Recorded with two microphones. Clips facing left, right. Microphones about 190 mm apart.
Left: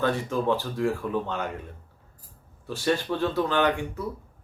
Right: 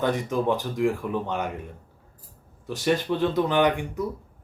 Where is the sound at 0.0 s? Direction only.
15° right (ahead or behind).